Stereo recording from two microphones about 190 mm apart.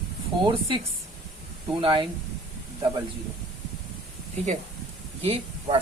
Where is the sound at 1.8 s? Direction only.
25° right (ahead or behind).